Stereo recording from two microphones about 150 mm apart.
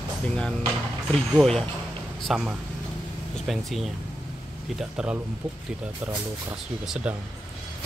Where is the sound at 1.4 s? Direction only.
Centre (ahead or behind).